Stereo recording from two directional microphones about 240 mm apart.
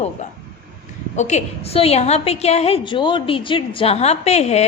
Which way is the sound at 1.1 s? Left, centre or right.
Left.